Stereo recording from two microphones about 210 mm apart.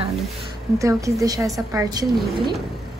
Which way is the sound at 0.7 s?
15° right (ahead or behind).